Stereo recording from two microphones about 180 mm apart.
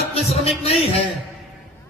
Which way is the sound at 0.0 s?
35° left (ahead or behind).